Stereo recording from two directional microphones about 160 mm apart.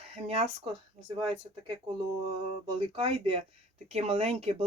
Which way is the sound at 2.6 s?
35° right (ahead or behind).